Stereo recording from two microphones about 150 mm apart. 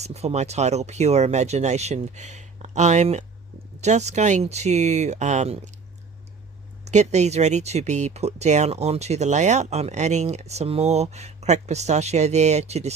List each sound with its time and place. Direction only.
0.0 s speech: 45° right (ahead or behind)
6.8 s speech: 50° right (ahead or behind)